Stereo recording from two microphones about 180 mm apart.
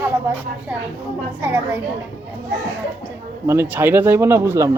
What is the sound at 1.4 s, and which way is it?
Speech, 10° right (ahead or behind).